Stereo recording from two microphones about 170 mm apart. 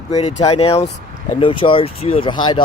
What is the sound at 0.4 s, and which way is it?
Speech, 35° left (ahead or behind).